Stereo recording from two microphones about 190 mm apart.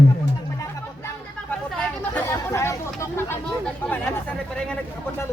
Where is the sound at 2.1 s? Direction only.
15° left (ahead or behind).